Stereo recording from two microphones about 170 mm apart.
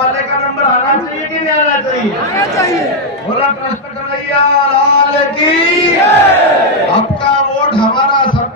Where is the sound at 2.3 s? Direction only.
20° left (ahead or behind).